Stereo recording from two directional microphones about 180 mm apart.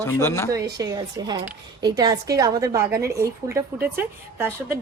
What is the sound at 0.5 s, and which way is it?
Speech, 20° right (ahead or behind).